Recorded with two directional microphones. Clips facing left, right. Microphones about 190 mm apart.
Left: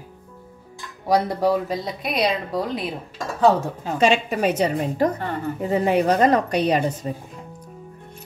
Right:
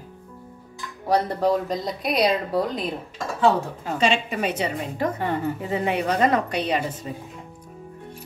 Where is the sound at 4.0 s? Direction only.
45° left (ahead or behind).